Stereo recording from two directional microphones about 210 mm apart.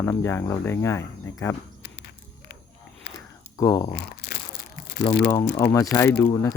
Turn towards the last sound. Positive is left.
turn(degrees=10)  # may be behind; listen again after turning